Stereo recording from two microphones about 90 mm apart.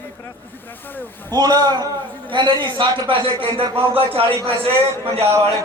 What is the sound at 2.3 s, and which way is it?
Speech, 65° right (ahead or behind).